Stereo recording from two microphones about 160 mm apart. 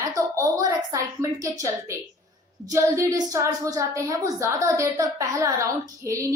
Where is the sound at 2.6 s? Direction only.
20° right (ahead or behind).